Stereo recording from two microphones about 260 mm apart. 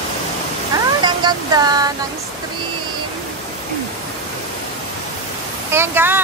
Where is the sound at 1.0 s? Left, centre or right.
Centre.